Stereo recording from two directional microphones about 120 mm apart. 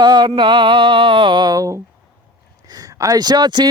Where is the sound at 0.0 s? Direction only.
35° right (ahead or behind).